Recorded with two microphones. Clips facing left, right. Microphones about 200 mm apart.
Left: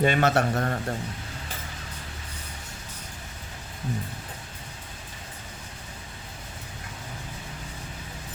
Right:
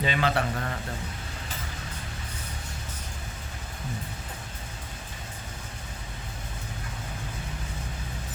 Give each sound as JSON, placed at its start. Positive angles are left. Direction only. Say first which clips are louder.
{"t": 0.0, "sound": "a man's voice", "louder": "left 5 dB", "side_deg": 50}